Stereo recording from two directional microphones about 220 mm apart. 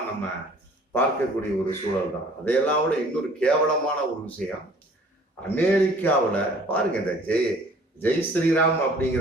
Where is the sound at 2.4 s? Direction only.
5° left (ahead or behind).